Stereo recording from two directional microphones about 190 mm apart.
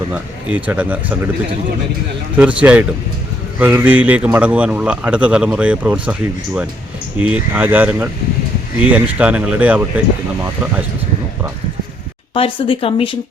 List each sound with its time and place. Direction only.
0.1 s a man's voice: 5° right (ahead or behind)
2.3 s a man's voice: 5° right (ahead or behind)
12.3 s speech: 30° left (ahead or behind)